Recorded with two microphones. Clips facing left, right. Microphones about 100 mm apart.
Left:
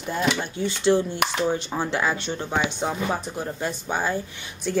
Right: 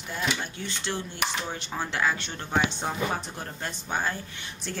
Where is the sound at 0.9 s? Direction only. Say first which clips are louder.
Left 11 dB; 20° left (ahead or behind).